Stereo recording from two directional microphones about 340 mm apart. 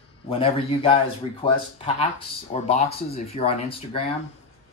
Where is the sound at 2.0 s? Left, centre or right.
Centre.